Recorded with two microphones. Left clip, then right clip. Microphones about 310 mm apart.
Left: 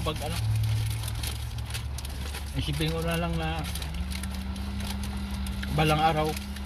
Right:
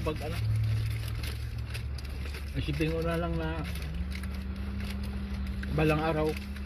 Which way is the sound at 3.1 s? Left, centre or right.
Centre.